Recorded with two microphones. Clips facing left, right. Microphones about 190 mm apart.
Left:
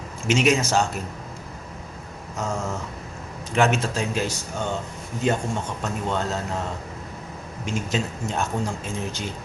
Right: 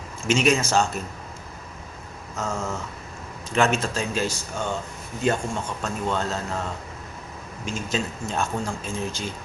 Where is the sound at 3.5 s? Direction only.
15° left (ahead or behind).